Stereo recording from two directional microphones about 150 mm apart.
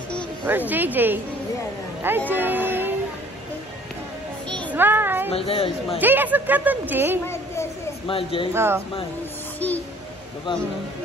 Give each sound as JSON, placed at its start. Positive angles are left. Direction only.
{"t": 0.5, "sound": "speech", "side_deg": -10}
{"t": 4.5, "sound": "child singing", "side_deg": 5}
{"t": 4.7, "sound": "child singing", "side_deg": -15}
{"t": 5.3, "sound": "speech", "side_deg": 40}
{"t": 5.9, "sound": "speech", "side_deg": -10}
{"t": 8.1, "sound": "speech", "side_deg": 35}
{"t": 8.5, "sound": "speech", "side_deg": -15}